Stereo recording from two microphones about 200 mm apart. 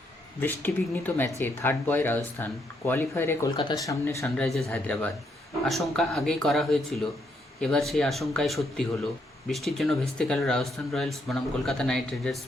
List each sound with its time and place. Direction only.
0.3 s speech: 10° left (ahead or behind)
3.5 s speech: 25° left (ahead or behind)
4.4 s speech: centre (ahead or behind)